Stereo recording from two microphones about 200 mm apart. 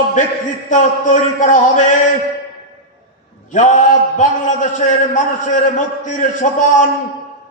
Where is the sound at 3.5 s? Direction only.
40° left (ahead or behind).